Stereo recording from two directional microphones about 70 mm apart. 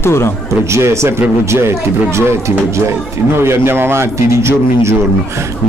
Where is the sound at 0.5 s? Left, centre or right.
Right.